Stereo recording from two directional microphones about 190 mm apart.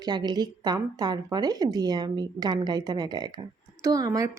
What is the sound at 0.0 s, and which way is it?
A woman's voice, 20° right (ahead or behind).